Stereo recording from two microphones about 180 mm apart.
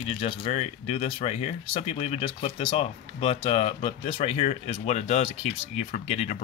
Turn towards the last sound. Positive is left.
turn(degrees=35)  # may be behind; listen again after turning